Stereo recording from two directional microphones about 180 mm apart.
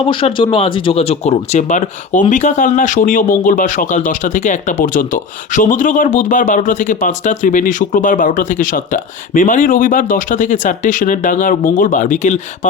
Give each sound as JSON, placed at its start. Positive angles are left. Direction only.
{"t": 0.1, "sound": "speech", "side_deg": 30}